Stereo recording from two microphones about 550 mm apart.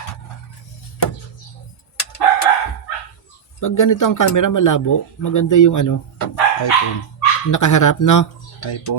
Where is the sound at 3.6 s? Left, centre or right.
Left.